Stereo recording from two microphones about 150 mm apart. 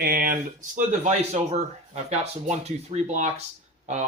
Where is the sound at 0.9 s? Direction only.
50° right (ahead or behind).